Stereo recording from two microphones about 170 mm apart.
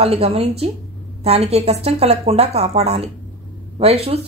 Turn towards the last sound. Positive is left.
turn(degrees=-35)  # may be behind; listen again after turning